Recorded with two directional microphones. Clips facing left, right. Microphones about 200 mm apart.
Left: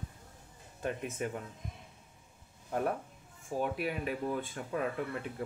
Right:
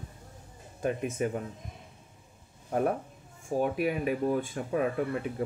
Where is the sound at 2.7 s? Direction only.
15° right (ahead or behind).